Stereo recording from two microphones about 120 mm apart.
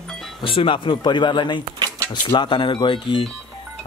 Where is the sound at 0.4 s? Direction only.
45° left (ahead or behind).